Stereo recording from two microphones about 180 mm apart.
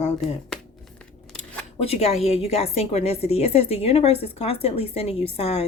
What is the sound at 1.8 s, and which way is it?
Speech, 35° left (ahead or behind).